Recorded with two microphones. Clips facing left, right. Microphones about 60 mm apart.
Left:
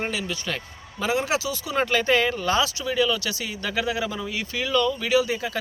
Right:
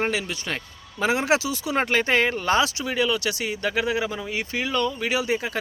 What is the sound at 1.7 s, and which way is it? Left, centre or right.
Speech, right.